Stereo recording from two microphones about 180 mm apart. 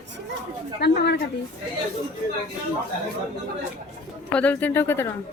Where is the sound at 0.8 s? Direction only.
65° left (ahead or behind).